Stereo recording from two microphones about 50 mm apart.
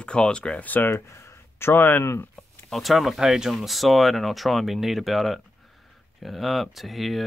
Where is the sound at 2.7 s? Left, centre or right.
Centre.